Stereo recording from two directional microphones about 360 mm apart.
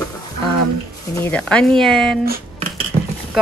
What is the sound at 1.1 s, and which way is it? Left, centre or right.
Speech, centre.